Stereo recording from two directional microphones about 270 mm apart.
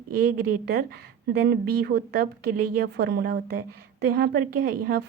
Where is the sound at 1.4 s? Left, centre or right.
Right.